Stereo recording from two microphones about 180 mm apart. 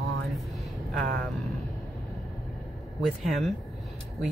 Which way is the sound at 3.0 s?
Centre (ahead or behind).